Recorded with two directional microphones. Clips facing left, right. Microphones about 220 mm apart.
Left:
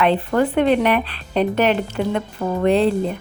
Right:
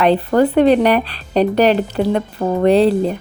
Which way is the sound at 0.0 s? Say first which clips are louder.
Right 4 dB; 35° right (ahead or behind).